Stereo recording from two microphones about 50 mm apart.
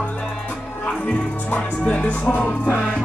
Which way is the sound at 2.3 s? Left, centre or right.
Left.